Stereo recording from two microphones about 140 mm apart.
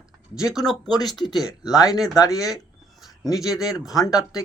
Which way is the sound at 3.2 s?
5° right (ahead or behind).